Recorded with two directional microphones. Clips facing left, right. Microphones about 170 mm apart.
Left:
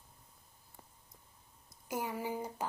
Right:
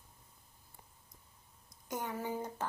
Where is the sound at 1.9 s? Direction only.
10° left (ahead or behind).